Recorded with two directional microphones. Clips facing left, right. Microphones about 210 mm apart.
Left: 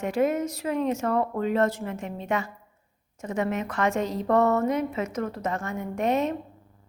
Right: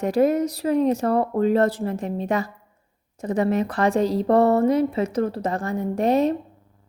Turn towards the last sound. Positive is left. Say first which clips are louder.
# right 5 dB
turn(degrees=-35)  # may be behind; listen again after turning